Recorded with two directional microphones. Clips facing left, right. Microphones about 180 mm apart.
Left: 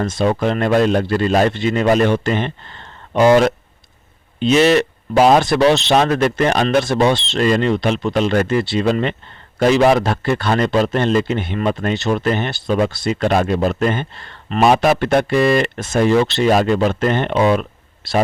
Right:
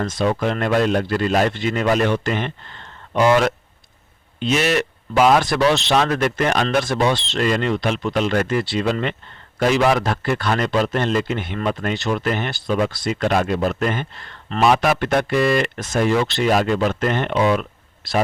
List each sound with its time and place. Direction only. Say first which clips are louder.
0.0 s a man's voice: left 3 dB; 25° left (ahead or behind)